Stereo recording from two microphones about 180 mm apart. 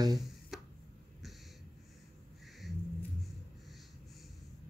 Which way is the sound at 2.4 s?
Centre (ahead or behind).